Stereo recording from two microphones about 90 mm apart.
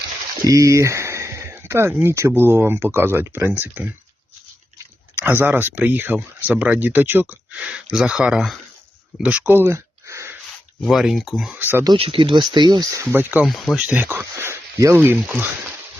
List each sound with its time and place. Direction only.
0.4 s a sound: 35° right (ahead or behind)
2.0 s speech: 25° right (ahead or behind)
5.1 s speech: 20° right (ahead or behind)
10.8 s speech: centre (ahead or behind)
11.5 s speech: 20° right (ahead or behind)
11.9 s speech: 85° right; by 12.9 s 55° right (ahead or behind)
12.9 s speech: 30° right (ahead or behind)
13.4 s speech: centre (ahead or behind)
13.7 s speech: 20° right (ahead or behind)